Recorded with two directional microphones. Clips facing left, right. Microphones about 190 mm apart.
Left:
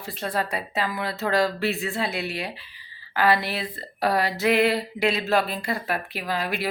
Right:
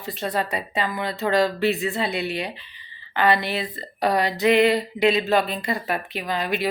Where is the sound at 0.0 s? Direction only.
Centre (ahead or behind).